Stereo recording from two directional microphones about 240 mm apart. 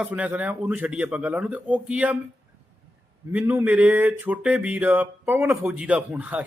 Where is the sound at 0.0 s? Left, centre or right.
Centre.